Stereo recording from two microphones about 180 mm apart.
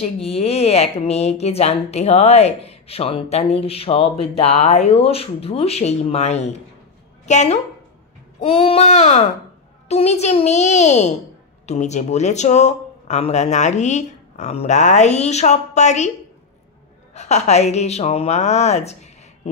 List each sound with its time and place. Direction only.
0.0 s a woman's voice: 35° left (ahead or behind)
17.1 s a woman's voice: 40° left (ahead or behind)